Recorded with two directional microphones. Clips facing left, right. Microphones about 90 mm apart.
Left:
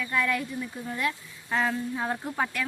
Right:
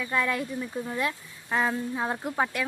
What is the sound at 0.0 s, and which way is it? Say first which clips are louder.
Speech: even; 15° right (ahead or behind).